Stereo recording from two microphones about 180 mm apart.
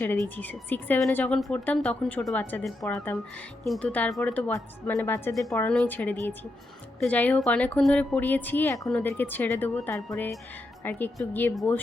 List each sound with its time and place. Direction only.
0.2 s a woman's voice: 10° left (ahead or behind)